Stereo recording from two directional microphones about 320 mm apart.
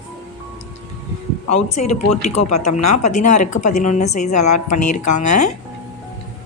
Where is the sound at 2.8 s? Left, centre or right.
Left.